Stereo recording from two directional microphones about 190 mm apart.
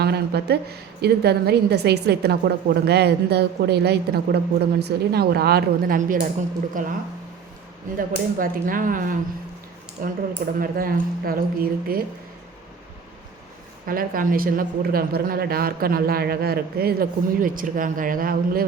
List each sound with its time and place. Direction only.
0.0 s a woman's voice: 60° right (ahead or behind)
7.9 s a woman's voice: 45° right (ahead or behind)
13.8 s a woman's voice: 50° right (ahead or behind)